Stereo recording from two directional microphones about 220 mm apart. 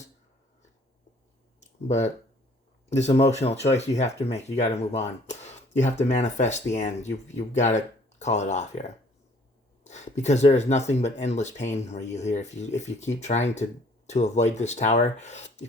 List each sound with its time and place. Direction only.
1.9 s speech: 30° left (ahead or behind)
3.2 s speech: 30° left (ahead or behind)